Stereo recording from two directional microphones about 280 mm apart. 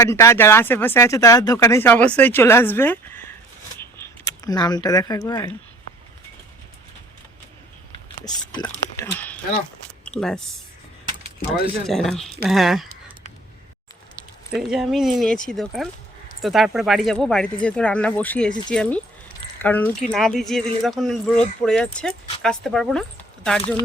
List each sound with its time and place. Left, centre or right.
0.0 s speech: centre
3.8 s a sound: centre
8.2 s speech: centre
11.9 s speech: centre
14.5 s speech: centre